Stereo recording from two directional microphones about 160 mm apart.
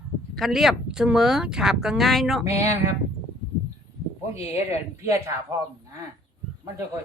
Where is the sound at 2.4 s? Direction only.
20° right (ahead or behind).